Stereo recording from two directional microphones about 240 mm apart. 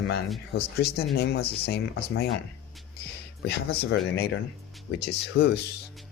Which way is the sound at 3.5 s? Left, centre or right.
Left.